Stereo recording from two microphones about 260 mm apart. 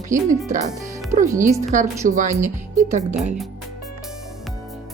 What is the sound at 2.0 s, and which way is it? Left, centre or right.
Speech, right.